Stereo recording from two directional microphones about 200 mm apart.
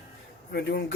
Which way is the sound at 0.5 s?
55° left (ahead or behind).